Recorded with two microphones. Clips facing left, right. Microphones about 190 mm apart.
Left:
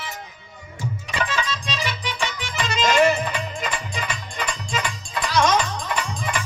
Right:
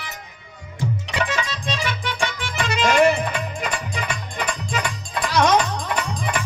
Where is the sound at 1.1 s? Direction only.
65° right (ahead or behind).